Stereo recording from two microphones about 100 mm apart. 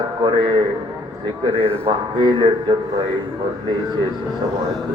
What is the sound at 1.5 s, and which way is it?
Speech, 70° right (ahead or behind).